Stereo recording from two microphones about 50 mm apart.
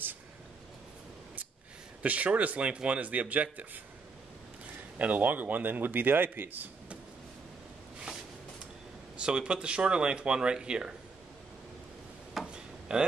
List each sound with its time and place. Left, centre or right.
2.0 s speech: right
4.9 s a man's voice: right
9.1 s speech: right
12.4 s a sound: centre
12.9 s speech: centre